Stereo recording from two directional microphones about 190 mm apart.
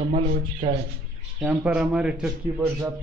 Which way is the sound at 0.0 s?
35° right (ahead or behind).